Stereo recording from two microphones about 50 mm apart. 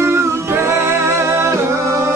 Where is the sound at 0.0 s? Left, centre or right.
Right.